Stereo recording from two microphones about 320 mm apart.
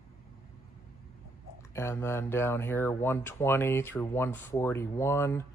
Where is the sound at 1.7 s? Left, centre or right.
Centre.